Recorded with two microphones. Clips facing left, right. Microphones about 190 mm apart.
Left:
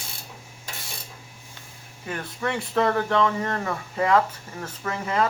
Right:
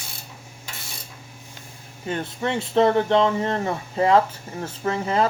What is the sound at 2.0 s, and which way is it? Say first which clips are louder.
Speech: right 3 dB; 25° right (ahead or behind).